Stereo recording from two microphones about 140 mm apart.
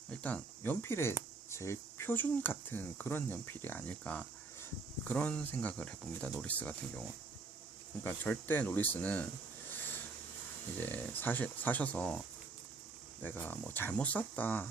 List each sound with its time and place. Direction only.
0.1 s speech: 10° left (ahead or behind)
8.0 s speech: 15° left (ahead or behind)
9.7 s a sound: 15° left (ahead or behind)
10.8 s speech: 15° left (ahead or behind)
13.2 s speech: 15° left (ahead or behind)